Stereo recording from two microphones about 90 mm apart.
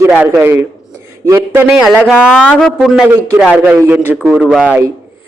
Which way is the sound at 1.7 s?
5° right (ahead or behind).